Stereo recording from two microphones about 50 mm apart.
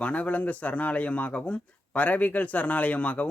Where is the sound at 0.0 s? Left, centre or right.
Left.